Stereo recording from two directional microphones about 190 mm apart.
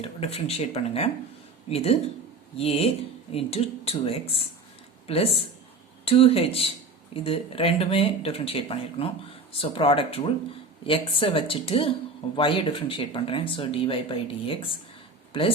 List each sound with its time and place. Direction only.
0.0 s speech: 30° left (ahead or behind)